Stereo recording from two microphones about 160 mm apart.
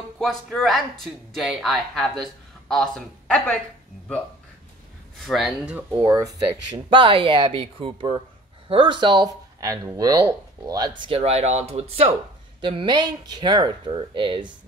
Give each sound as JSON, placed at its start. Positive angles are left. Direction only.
{"t": 0.2, "sound": "speech", "side_deg": 0}
{"t": 5.2, "sound": "speech", "side_deg": 0}
{"t": 5.8, "sound": "speech", "side_deg": -10}
{"t": 6.9, "sound": "speech", "side_deg": -30}
{"t": 11.0, "sound": "speech", "side_deg": -35}
{"t": 12.6, "sound": "speech", "side_deg": -30}